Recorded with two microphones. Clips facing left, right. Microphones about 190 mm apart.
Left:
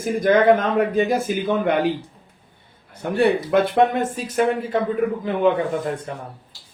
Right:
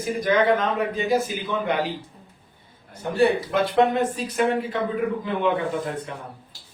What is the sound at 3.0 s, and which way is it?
Speech, 60° left (ahead or behind).